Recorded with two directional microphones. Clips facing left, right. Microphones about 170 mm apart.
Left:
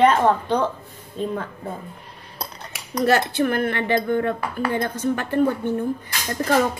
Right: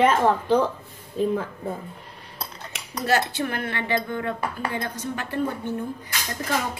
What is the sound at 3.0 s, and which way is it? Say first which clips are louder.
Speech: left 5 dB; 55° left (ahead or behind).